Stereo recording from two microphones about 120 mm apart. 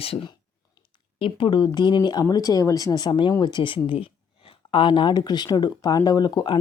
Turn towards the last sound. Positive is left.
turn(degrees=35)  # may be behind; listen again after turning